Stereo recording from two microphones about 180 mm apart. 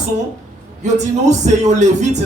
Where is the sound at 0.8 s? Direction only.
40° right (ahead or behind).